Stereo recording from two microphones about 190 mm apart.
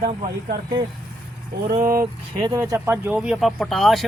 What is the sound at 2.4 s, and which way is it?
Speech, 20° right (ahead or behind).